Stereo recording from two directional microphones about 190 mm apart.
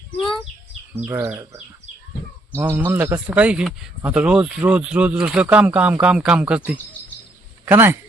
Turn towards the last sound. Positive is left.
turn(degrees=-10)  # may be behind; listen again after turning